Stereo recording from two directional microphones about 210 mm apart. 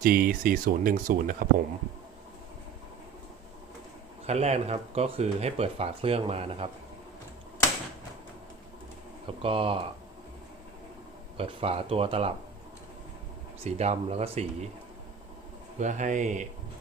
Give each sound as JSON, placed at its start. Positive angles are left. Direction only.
{"t": 0.0, "sound": "speech", "side_deg": -45}
{"t": 4.3, "sound": "speech", "side_deg": -30}
{"t": 9.4, "sound": "speech", "side_deg": -25}
{"t": 11.3, "sound": "speech", "side_deg": -25}
{"t": 13.7, "sound": "speech", "side_deg": -30}
{"t": 15.8, "sound": "speech", "side_deg": -35}